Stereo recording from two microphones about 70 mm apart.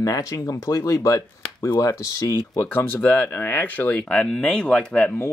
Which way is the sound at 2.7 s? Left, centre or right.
Left.